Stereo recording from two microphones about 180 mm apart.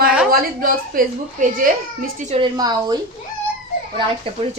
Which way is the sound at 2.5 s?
20° right (ahead or behind).